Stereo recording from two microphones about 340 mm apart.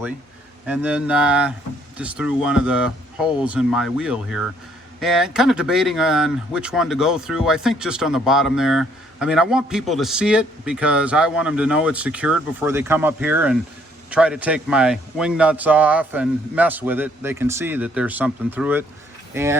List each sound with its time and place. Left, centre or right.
0.7 s speech: centre